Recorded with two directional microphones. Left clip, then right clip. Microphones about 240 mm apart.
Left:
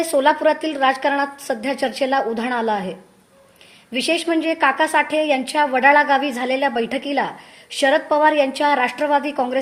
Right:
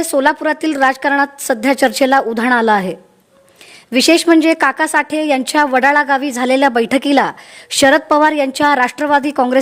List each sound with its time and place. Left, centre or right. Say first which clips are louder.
0.0 s a woman's voice: right 2 dB; right
3.9 s a woman's voice: right 9 dB; right